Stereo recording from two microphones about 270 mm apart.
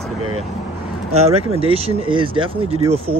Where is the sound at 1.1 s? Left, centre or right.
Right.